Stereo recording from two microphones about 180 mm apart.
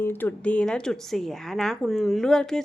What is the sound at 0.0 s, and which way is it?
A woman's voice, 10° left (ahead or behind).